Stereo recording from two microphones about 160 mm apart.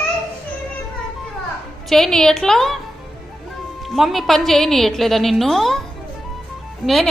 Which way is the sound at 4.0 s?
Centre (ahead or behind).